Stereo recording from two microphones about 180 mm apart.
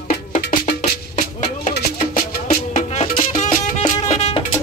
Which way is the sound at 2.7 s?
40° left (ahead or behind).